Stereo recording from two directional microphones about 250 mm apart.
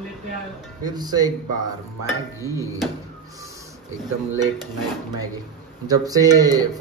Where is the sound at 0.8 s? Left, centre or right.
Centre.